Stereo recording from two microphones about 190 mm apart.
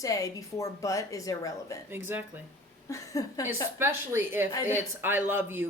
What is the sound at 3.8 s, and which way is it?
A man's voice, 10° right (ahead or behind).